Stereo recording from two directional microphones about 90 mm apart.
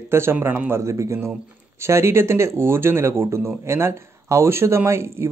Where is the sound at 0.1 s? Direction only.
25° right (ahead or behind).